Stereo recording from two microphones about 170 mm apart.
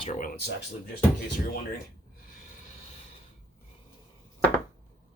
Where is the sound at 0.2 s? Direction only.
70° left (ahead or behind).